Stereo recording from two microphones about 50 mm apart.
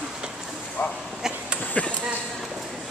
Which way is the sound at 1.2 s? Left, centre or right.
Centre.